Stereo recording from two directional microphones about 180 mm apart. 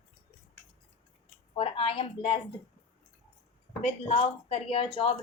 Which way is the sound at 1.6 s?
30° left (ahead or behind).